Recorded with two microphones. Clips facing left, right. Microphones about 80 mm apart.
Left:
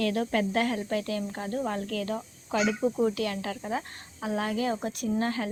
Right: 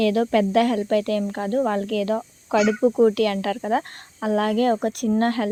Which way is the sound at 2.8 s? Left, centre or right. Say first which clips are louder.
Right 9 dB; right.